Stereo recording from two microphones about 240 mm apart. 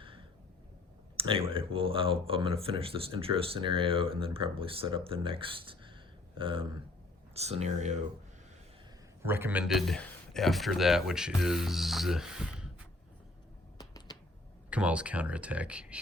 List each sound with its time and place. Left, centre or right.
1.1 s speech: right
9.2 s a man's voice: centre
13.7 s a sound: centre
14.7 s a man's voice: centre